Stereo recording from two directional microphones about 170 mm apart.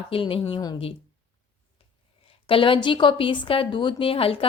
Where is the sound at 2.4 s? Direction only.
30° left (ahead or behind).